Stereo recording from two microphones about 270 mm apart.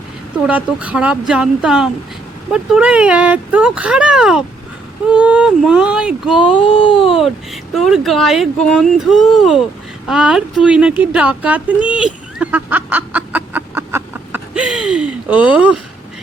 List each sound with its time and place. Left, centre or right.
0.4 s speech: centre
6.7 s speech: centre
7.2 s speech: centre
11.9 s a sound: centre